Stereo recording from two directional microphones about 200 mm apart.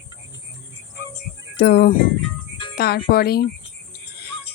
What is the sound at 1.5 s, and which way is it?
Speech, 55° left (ahead or behind).